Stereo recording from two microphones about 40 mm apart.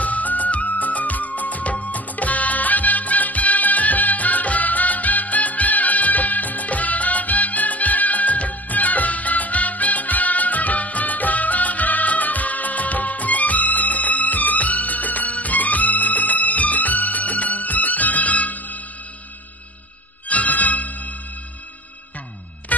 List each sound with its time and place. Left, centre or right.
0.0 s music of bollywood: left
20.2 s music: left
22.7 s music: left